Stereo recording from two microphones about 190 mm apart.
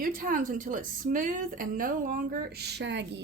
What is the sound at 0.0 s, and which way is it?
A woman's voice, 45° right (ahead or behind).